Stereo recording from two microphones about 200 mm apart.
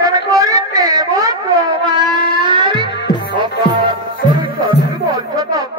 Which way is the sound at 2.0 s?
20° right (ahead or behind).